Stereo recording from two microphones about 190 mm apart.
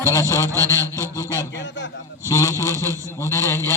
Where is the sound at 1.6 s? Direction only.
70° left (ahead or behind).